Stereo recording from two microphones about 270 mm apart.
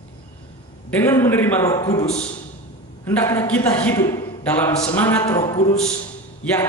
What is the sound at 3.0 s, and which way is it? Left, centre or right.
A man's voice, centre.